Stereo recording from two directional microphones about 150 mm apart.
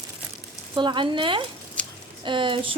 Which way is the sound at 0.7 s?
30° right (ahead or behind).